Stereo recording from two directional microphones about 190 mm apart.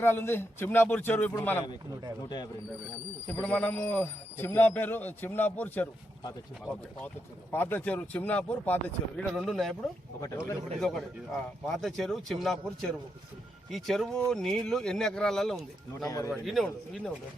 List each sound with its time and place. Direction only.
0.0 s a man's voice: 10° left (ahead or behind)
3.2 s a man's voice: 10° left (ahead or behind)
7.5 s a man's voice: 10° left (ahead or behind)
10.2 s a man's voice: 15° left (ahead or behind)
10.8 s speech: centre (ahead or behind)
16.0 s a man's voice: 15° left (ahead or behind)
16.3 s speech: centre (ahead or behind)